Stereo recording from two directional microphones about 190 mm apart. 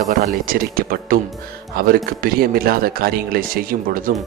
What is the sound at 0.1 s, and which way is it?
Speech, 50° right (ahead or behind).